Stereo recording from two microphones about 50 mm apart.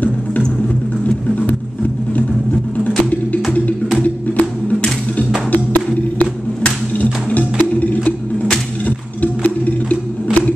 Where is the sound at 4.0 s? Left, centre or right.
Left.